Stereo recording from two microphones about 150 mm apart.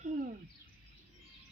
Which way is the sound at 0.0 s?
60° right (ahead or behind).